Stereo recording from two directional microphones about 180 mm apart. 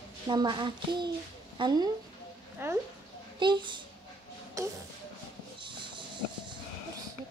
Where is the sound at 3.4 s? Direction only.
25° right (ahead or behind).